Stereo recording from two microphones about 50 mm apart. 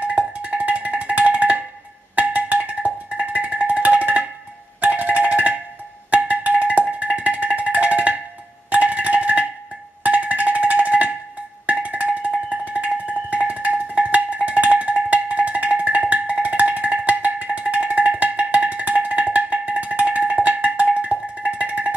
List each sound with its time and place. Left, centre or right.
0.0 s music: right